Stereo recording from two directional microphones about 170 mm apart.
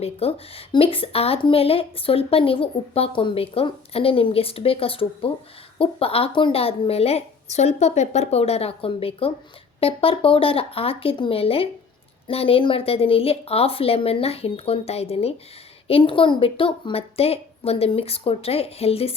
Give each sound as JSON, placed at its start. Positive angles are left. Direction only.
{"t": 0.0, "sound": "a woman's voice", "side_deg": 35}